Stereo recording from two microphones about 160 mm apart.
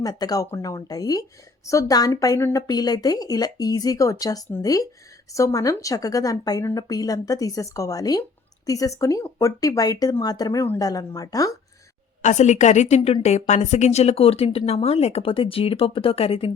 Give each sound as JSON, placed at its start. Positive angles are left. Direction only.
{"t": 0.0, "sound": "a woman's voice", "side_deg": 25}
{"t": 12.2, "sound": "a woman's voice", "side_deg": 45}